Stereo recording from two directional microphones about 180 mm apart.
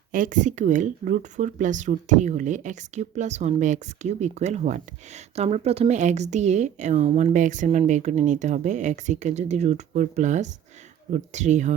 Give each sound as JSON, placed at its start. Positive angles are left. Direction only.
{"t": 0.1, "sound": "speech", "side_deg": -45}
{"t": 7.3, "sound": "speech", "side_deg": -45}